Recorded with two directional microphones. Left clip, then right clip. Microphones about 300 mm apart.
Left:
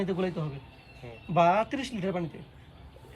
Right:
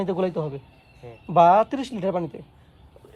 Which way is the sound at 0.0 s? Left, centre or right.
Centre.